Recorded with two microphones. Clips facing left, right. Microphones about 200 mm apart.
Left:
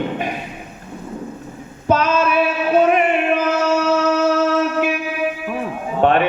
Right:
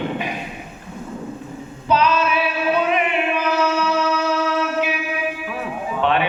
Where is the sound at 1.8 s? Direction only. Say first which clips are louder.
Left 2 dB; 45° left (ahead or behind).